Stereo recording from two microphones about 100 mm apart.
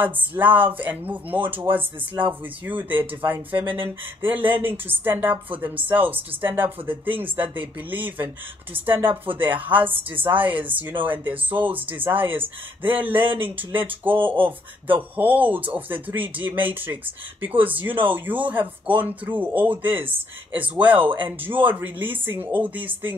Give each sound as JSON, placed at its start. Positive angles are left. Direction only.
{"t": 0.0, "sound": "speech", "side_deg": -15}